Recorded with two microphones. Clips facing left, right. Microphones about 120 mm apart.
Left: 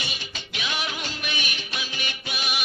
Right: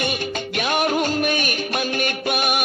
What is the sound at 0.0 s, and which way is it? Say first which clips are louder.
Music: right 13 dB; 50° right (ahead or behind).